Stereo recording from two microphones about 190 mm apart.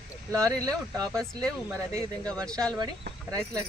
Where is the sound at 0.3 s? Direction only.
15° right (ahead or behind).